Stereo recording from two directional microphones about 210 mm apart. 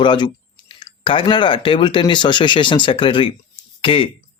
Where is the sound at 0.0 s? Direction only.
20° left (ahead or behind).